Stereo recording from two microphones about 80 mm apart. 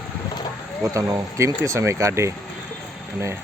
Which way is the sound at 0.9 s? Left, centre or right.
Right.